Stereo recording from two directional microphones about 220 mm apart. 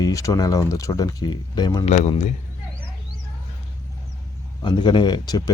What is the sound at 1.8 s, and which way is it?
Speech, 30° left (ahead or behind).